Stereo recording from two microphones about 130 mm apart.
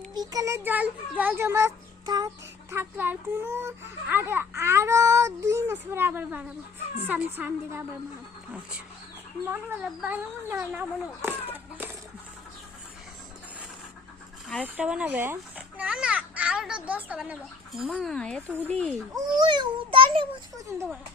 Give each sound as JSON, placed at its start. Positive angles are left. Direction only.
{"t": 0.1, "sound": "speech", "side_deg": -30}
{"t": 2.6, "sound": "speech", "side_deg": -15}
{"t": 9.5, "sound": "speech", "side_deg": -15}
{"t": 10.8, "sound": "a sound", "side_deg": -15}
{"t": 14.6, "sound": "a child's voice", "side_deg": -10}
{"t": 19.1, "sound": "a child's voice", "side_deg": -35}